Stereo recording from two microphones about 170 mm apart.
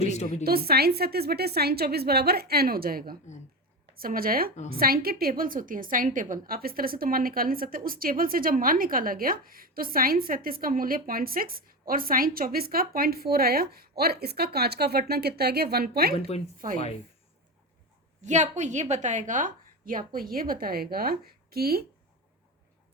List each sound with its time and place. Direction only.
0.0 s a woman's voice: 40° left (ahead or behind)
0.4 s a woman's voice: 65° right (ahead or behind)
16.1 s a woman's voice: 35° left (ahead or behind)
16.6 s speech: 55° right (ahead or behind)
18.2 s a woman's voice: 45° right (ahead or behind); by 21.8 s 65° right (ahead or behind)